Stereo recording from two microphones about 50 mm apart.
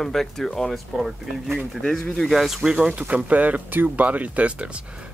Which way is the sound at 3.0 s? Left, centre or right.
Right.